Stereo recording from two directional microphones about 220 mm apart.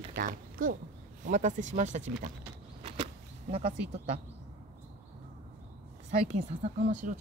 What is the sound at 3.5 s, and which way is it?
Speech, 25° right (ahead or behind).